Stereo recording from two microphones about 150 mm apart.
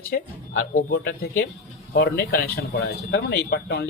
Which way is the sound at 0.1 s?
90° left.